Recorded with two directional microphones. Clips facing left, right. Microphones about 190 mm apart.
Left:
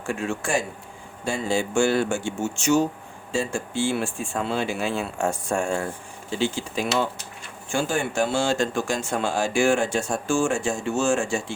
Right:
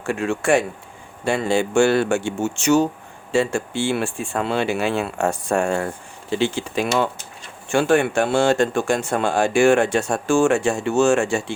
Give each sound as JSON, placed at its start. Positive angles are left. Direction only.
{"t": 0.0, "sound": "speech", "side_deg": -70}